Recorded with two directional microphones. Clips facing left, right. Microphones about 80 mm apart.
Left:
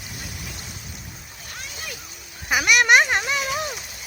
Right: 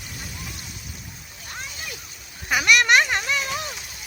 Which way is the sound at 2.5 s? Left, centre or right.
Centre.